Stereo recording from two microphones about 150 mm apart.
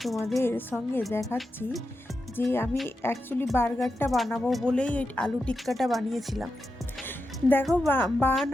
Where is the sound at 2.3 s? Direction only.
15° left (ahead or behind).